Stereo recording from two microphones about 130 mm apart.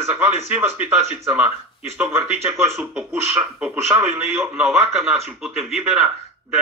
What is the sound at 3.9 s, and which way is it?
Speech, 20° right (ahead or behind).